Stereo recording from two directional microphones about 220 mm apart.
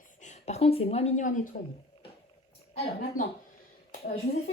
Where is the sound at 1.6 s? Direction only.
45° left (ahead or behind).